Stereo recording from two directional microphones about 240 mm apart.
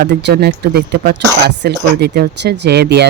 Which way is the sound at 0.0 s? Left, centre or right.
Right.